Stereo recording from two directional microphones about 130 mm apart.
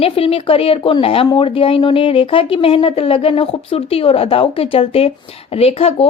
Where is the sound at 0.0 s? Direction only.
45° left (ahead or behind).